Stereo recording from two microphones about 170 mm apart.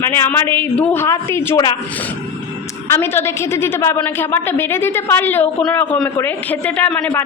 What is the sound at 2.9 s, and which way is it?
A woman's voice, 15° left (ahead or behind).